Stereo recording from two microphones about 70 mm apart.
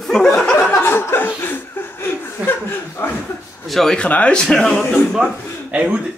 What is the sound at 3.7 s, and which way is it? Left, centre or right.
Speech, centre.